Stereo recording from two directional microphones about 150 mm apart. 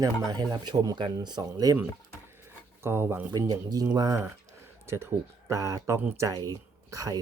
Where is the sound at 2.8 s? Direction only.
15° right (ahead or behind).